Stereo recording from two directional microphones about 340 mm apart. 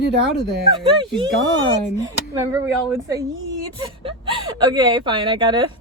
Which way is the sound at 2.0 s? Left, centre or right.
Centre.